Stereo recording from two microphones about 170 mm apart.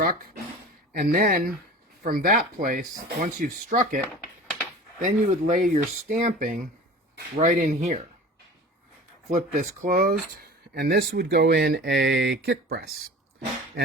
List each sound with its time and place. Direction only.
0.0 s a sound: 55° right (ahead or behind)
0.9 s speech: 55° right (ahead or behind)
9.3 s speech: 55° right (ahead or behind); by 12.8 s 70° right (ahead or behind)